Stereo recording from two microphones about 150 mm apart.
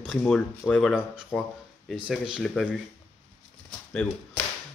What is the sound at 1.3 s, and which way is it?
Speech, 5° right (ahead or behind).